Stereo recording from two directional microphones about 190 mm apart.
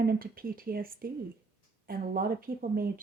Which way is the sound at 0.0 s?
50° right (ahead or behind).